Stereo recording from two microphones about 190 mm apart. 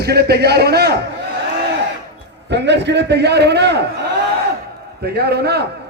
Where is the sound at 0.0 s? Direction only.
60° right (ahead or behind).